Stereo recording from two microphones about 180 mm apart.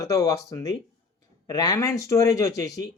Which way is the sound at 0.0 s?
20° left (ahead or behind).